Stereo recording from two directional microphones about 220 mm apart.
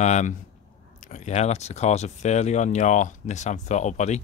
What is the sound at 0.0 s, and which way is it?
Speech, 30° left (ahead or behind).